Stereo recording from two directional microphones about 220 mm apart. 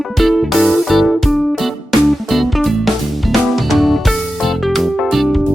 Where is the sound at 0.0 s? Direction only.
Centre (ahead or behind).